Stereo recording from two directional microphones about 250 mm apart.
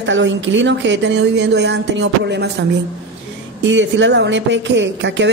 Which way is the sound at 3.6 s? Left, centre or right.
Right.